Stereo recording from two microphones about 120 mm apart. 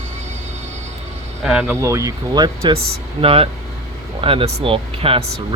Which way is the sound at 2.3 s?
35° right (ahead or behind).